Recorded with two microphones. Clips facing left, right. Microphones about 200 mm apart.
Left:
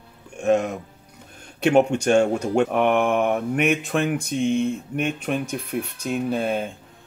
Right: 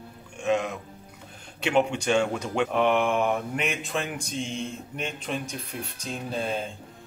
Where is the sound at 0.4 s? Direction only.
50° left (ahead or behind).